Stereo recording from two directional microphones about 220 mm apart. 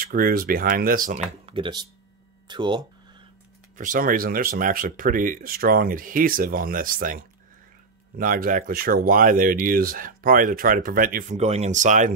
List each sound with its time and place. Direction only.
0.0 s speech: 40° right (ahead or behind); by 2.8 s 20° right (ahead or behind)
3.7 s speech: 35° right (ahead or behind)
8.2 s speech: 40° right (ahead or behind)